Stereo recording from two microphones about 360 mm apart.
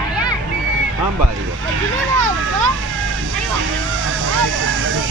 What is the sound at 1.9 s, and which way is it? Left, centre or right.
Vehicle, right.